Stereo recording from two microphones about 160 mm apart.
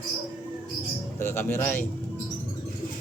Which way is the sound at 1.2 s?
15° left (ahead or behind).